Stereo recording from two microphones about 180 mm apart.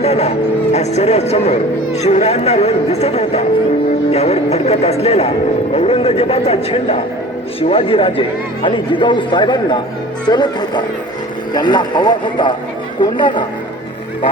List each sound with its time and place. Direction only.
0.0 s speech: 35° left (ahead or behind)